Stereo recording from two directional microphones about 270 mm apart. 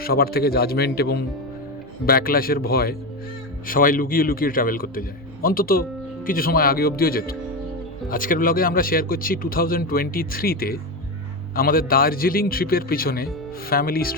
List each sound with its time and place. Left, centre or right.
0.0 s speech: left